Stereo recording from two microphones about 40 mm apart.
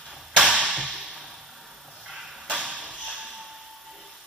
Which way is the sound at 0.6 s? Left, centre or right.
Right.